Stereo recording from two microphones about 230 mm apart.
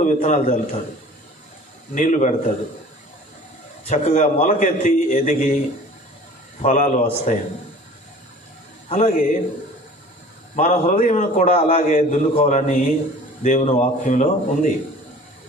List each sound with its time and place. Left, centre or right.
0.0 s a man's voice: left
2.0 s a man's voice: left
3.8 s a man's voice: left
6.6 s a man's voice: left
8.8 s a man's voice: left
10.5 s a man's voice: left